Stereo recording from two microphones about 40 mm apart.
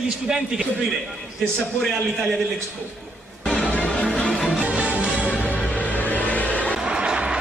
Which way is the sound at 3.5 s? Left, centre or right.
Left.